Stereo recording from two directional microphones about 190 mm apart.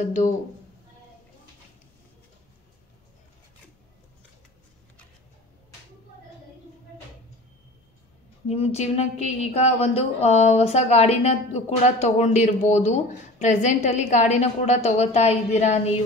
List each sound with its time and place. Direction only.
8.5 s a woman's voice: 35° left (ahead or behind)